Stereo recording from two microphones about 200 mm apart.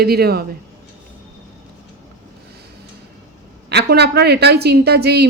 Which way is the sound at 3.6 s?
55° right (ahead or behind).